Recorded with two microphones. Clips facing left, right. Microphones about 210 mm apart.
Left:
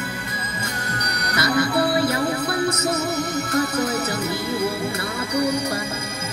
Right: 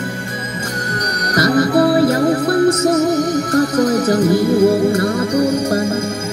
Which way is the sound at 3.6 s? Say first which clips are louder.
Right 9 dB; 50° right (ahead or behind).